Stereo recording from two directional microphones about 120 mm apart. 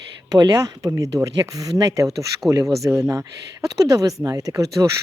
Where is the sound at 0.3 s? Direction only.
35° right (ahead or behind).